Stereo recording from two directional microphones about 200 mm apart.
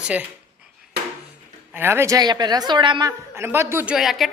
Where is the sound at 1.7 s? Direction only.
10° right (ahead or behind).